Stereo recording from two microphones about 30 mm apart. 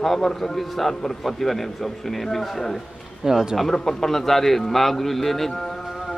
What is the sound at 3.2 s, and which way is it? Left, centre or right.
Speech, centre.